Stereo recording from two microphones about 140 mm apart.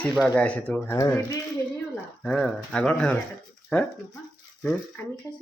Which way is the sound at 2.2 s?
5° left (ahead or behind).